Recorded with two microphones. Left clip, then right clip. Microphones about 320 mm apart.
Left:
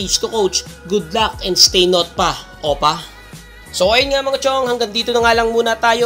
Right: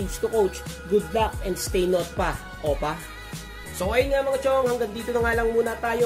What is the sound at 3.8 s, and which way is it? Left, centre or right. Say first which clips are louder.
A man's voice: left 9 dB; left.